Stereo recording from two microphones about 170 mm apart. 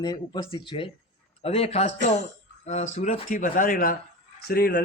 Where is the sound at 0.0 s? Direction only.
25° left (ahead or behind); by 3.9 s 55° left (ahead or behind).